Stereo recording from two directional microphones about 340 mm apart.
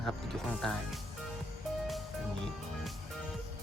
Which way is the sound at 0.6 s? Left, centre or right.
Centre.